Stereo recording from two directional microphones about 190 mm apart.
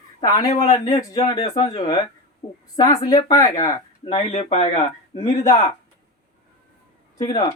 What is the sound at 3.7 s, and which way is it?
Speech, 30° left (ahead or behind).